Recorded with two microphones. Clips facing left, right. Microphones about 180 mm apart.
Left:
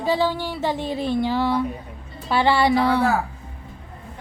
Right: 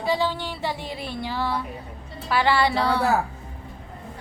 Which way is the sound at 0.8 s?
10° right (ahead or behind).